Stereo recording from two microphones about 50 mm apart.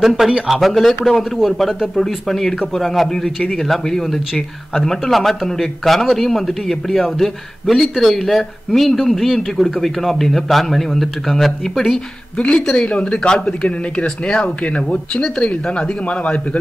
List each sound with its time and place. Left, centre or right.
0.0 s speech: centre
12.4 s speech: centre